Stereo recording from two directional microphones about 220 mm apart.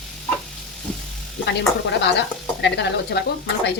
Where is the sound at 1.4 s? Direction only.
50° left (ahead or behind).